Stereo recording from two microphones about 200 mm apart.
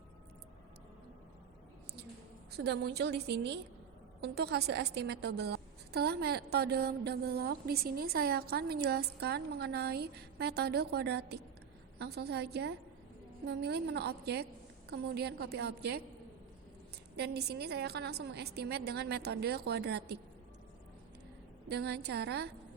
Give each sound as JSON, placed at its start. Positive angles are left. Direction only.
{"t": 2.6, "sound": "a woman's voice", "side_deg": -55}
{"t": 17.2, "sound": "a woman's voice", "side_deg": -55}
{"t": 21.7, "sound": "a woman's voice", "side_deg": -55}